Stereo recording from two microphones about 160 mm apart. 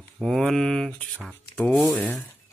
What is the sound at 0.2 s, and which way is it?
A man's voice, 5° left (ahead or behind).